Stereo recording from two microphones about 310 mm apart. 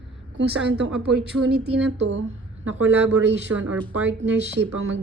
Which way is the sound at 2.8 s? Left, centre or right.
Centre.